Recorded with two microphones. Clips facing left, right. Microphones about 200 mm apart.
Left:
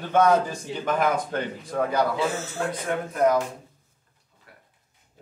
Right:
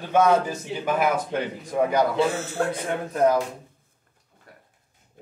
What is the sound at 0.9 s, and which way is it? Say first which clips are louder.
A man's voice: right 1 dB; 10° right (ahead or behind).